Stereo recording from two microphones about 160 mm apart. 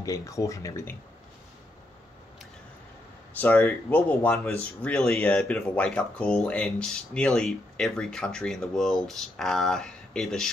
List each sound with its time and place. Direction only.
0.0 s speech: 20° left (ahead or behind)
3.3 s speech: 10° left (ahead or behind)